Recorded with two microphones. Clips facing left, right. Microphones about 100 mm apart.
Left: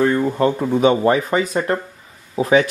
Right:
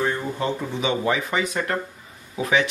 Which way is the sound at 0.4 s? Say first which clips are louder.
Left 9 dB; 45° left (ahead or behind).